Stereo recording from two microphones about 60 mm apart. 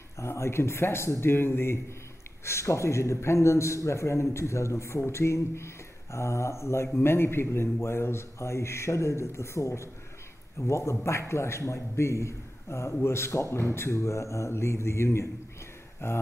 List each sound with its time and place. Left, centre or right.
0.2 s a man's voice: left